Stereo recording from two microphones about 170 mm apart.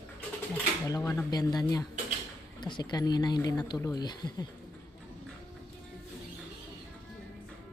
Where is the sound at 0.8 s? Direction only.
20° left (ahead or behind).